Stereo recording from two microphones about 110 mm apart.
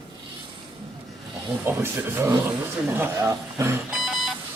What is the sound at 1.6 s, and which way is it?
A man's voice, 20° right (ahead or behind).